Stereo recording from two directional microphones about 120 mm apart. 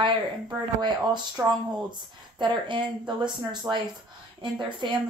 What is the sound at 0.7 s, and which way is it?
Speech, 35° right (ahead or behind).